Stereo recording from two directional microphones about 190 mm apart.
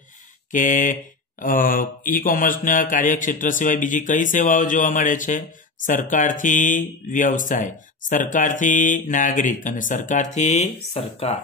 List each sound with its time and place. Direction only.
0.5 s speech: 45° left (ahead or behind)